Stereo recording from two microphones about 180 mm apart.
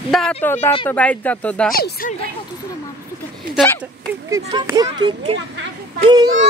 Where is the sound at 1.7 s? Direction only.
55° left (ahead or behind).